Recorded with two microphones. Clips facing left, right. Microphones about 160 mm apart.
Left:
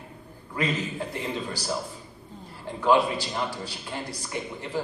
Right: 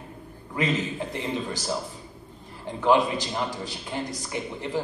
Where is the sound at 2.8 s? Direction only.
20° right (ahead or behind).